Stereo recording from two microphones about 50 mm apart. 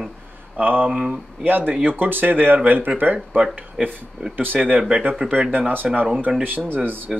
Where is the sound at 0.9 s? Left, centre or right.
Right.